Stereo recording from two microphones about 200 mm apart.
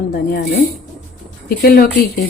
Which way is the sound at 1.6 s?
50° left (ahead or behind).